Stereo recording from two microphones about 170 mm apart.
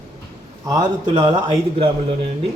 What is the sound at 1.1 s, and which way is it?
Speech, 25° right (ahead or behind).